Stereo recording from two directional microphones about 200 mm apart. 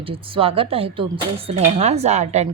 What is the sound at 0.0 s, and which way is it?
A woman's voice, 25° right (ahead or behind).